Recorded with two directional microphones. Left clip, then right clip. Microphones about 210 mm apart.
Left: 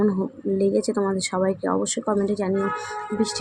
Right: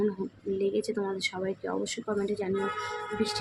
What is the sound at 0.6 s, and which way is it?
Speech, 15° left (ahead or behind).